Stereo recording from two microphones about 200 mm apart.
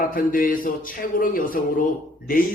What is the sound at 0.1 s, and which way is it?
A man's voice, 45° left (ahead or behind).